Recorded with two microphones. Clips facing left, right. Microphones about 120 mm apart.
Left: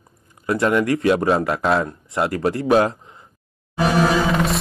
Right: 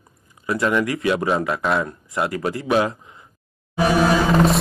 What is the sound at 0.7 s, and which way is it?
A man's voice, centre (ahead or behind).